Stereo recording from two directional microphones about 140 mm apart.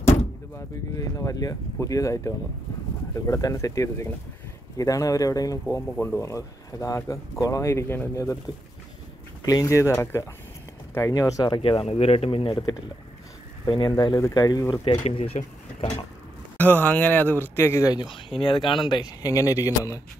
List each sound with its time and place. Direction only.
0.9 s speech: 25° left (ahead or behind)
9.4 s speech: 25° left (ahead or behind)
14.9 s speech: 45° left (ahead or behind)
16.5 s speech: 10° left (ahead or behind)
18.4 s speech: 35° left (ahead or behind)